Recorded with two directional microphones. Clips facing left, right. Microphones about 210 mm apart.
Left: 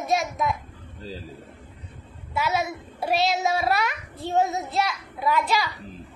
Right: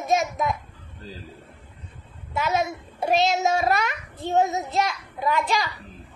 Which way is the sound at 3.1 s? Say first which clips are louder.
Right 2 dB; 45° right (ahead or behind).